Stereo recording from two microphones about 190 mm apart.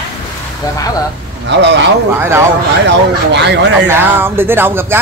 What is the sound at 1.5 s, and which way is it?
Speech, 65° right (ahead or behind).